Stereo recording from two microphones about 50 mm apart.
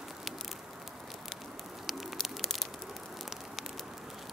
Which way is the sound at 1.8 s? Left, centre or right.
Centre.